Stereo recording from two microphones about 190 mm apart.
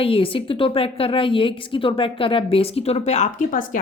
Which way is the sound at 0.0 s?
30° left (ahead or behind).